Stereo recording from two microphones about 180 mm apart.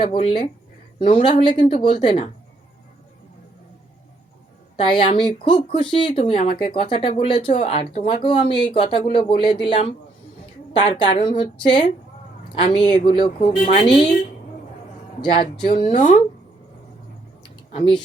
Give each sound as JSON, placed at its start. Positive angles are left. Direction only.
{"t": 0.0, "sound": "speech", "side_deg": 30}
{"t": 4.9, "sound": "speech", "side_deg": 25}
{"t": 10.8, "sound": "speech", "side_deg": 25}
{"t": 15.2, "sound": "speech", "side_deg": 25}
{"t": 17.7, "sound": "speech", "side_deg": 30}